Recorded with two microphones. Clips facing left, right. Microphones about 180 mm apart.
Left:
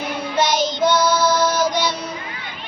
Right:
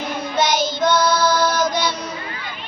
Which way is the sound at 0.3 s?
10° left (ahead or behind).